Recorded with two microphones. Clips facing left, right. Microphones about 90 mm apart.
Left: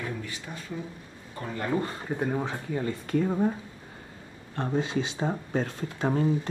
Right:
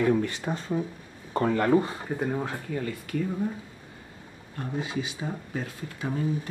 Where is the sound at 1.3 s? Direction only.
65° right (ahead or behind).